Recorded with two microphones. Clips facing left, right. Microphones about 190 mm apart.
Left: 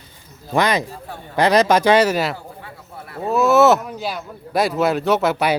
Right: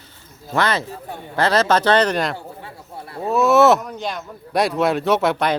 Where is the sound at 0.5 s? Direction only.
15° left (ahead or behind).